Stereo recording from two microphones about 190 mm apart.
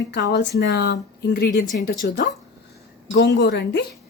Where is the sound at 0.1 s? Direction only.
60° left (ahead or behind).